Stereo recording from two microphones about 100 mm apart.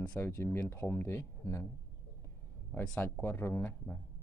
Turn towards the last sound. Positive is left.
turn(degrees=20)  # may be behind; listen again after turning